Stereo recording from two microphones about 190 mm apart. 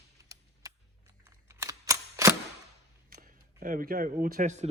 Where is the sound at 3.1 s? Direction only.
45° right (ahead or behind).